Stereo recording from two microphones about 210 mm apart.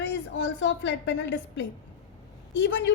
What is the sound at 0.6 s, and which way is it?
A woman's voice, 60° left (ahead or behind).